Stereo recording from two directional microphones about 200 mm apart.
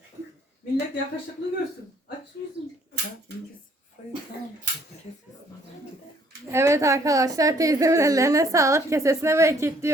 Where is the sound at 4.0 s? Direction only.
40° left (ahead or behind).